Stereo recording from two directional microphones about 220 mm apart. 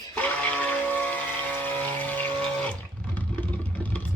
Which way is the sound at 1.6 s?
5° left (ahead or behind).